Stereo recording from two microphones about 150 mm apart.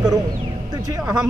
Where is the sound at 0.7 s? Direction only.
25° right (ahead or behind).